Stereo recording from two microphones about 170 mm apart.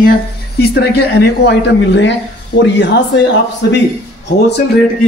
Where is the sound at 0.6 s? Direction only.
75° left (ahead or behind); by 3.0 s 90° left.